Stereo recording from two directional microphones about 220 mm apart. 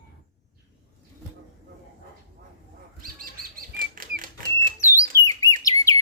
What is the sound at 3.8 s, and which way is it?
Typewriter, 40° right (ahead or behind).